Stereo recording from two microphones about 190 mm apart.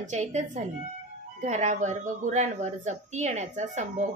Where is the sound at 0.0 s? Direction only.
40° right (ahead or behind).